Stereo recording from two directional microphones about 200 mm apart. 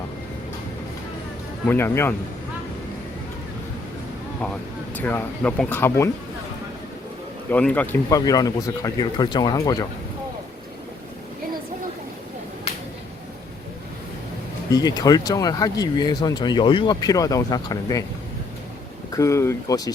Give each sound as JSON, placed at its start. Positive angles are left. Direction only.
{"t": 1.6, "sound": "speech", "side_deg": 10}
{"t": 4.9, "sound": "speech", "side_deg": 10}
{"t": 7.5, "sound": "speech", "side_deg": 10}
{"t": 14.7, "sound": "speech", "side_deg": 20}
{"t": 19.1, "sound": "speech", "side_deg": 15}